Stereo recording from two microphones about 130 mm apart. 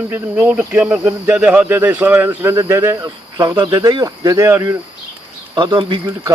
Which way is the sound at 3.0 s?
35° right (ahead or behind).